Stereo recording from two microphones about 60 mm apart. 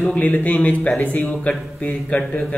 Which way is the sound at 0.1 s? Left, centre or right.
Left.